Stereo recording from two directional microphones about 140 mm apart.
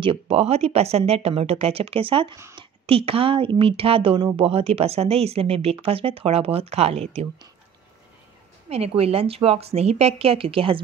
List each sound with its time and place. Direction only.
0.0 s speech: 45° right (ahead or behind)
2.3 s speech: 20° right (ahead or behind)
2.9 s speech: 40° right (ahead or behind)
8.6 s speech: 45° right (ahead or behind)